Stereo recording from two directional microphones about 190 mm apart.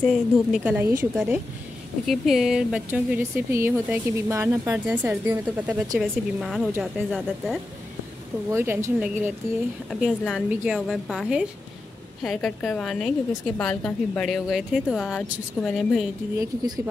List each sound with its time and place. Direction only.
0.1 s a woman's voice: 5° right (ahead or behind)
8.5 s speech: 15° right (ahead or behind)
9.8 s a woman's voice: centre (ahead or behind)
16.3 s speech: 20° right (ahead or behind)